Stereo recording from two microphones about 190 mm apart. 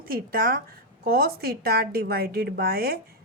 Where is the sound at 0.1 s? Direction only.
50° right (ahead or behind).